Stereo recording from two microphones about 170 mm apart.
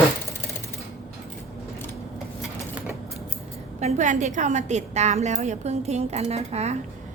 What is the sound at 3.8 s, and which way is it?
A woman's voice, 45° right (ahead or behind).